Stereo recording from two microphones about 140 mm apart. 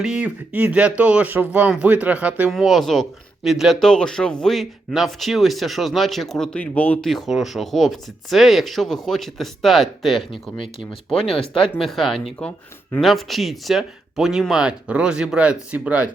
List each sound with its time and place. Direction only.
0.0 s speech: 5° right (ahead or behind); by 7.1 s 10° left (ahead or behind)
7.1 s speech: centre (ahead or behind)
11.3 s speech: 40° left (ahead or behind)
11.8 s speech: centre (ahead or behind)